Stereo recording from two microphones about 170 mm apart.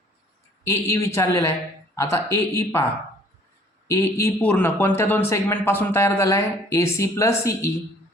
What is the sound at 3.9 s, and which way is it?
A man's voice, 20° left (ahead or behind).